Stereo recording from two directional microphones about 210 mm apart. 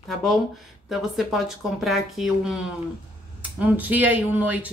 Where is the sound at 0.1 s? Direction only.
Centre (ahead or behind).